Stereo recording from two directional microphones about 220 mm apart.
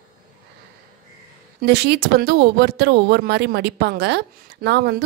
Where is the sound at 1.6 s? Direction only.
50° right (ahead or behind).